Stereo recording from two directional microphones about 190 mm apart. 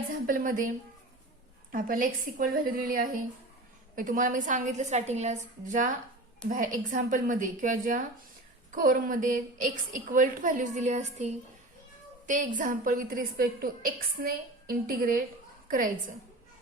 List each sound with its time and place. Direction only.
0.3 s a woman's voice: 45° right (ahead or behind)
1.7 s a woman's voice: 45° right (ahead or behind)